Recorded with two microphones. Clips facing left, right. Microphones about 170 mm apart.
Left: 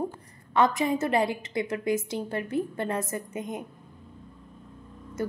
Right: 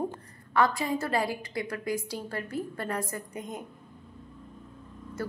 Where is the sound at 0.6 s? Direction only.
20° left (ahead or behind).